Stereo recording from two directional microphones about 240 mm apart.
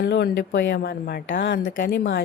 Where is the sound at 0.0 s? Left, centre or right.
Left.